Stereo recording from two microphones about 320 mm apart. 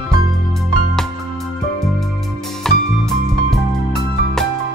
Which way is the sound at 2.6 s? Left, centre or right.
Centre.